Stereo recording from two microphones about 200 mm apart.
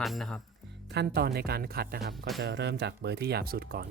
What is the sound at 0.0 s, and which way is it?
Speech, centre (ahead or behind).